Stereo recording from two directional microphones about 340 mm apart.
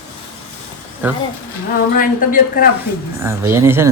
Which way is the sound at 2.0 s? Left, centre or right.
Left.